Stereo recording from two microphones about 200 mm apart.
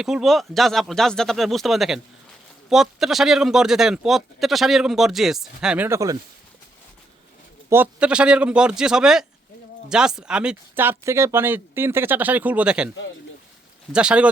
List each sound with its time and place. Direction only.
0.0 s speech: centre (ahead or behind)
7.7 s speech: 10° right (ahead or behind)
13.9 s speech: 5° right (ahead or behind)